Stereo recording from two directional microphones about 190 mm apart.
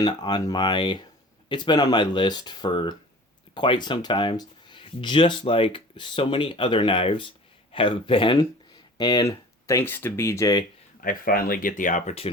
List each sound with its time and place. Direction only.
0.0 s speech: 20° left (ahead or behind)
11.0 s speech: 50° left (ahead or behind)